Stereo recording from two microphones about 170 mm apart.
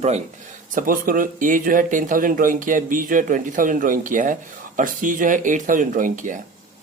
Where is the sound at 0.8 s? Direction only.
55° right (ahead or behind).